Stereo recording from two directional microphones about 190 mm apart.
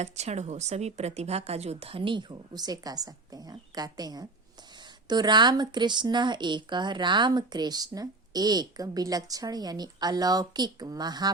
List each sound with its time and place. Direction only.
0.0 s a woman's voice: 35° right (ahead or behind)